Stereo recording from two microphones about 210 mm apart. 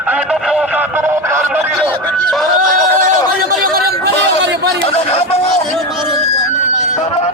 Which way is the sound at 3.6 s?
50° right (ahead or behind).